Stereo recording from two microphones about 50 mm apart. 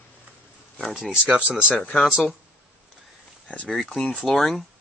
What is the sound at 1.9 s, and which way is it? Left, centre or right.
Speech, centre.